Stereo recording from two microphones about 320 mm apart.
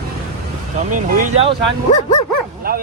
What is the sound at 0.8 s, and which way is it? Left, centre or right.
Speech, right.